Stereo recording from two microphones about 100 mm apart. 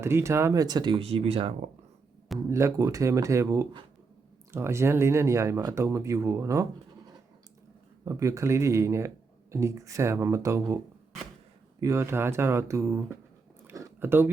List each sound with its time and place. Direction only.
0.0 s speech: 25° right (ahead or behind); by 1.0 s 50° right (ahead or behind)
1.0 s speech: 75° right (ahead or behind)
2.5 s speech: 30° right (ahead or behind)
8.0 s speech: 30° right (ahead or behind)
11.8 s speech: 30° right (ahead or behind)
14.0 s speech: 20° right (ahead or behind)